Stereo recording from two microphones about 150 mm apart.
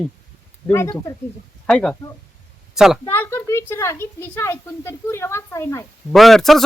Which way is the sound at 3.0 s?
15° left (ahead or behind).